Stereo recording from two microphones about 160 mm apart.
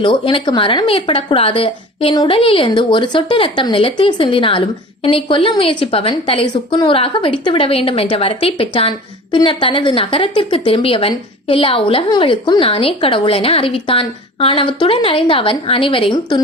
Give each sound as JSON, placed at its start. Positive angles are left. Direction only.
{"t": 0.0, "sound": "a woman's voice", "side_deg": 30}